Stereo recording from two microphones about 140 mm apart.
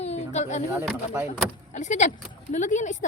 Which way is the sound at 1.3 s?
55° left (ahead or behind).